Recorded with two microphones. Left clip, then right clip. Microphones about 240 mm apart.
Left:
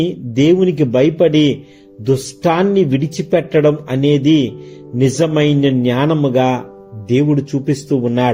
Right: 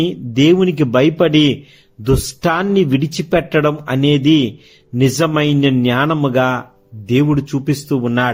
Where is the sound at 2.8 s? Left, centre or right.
Right.